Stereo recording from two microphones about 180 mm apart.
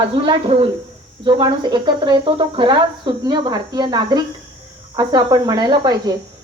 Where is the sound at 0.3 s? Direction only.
25° right (ahead or behind).